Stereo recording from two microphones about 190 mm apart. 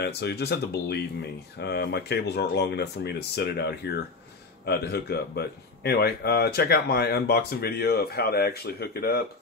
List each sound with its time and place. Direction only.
0.0 s speech: 60° left (ahead or behind)